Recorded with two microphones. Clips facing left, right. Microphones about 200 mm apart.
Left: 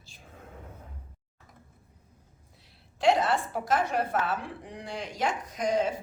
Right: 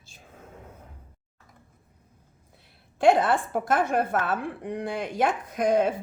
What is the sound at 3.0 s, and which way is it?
A woman's voice, 55° right (ahead or behind).